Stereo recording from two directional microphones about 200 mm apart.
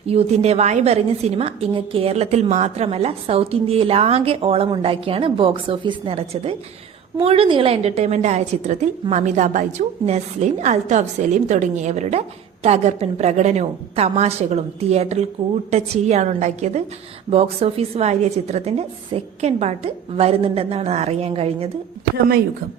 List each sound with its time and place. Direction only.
0.1 s a woman's voice: 30° right (ahead or behind)